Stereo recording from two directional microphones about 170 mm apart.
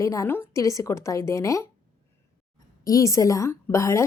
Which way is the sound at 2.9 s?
20° left (ahead or behind).